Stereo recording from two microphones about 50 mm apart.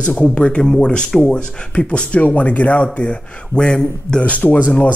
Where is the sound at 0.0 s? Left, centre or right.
Left.